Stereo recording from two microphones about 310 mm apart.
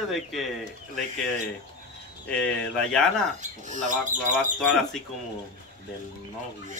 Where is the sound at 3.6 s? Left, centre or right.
Right.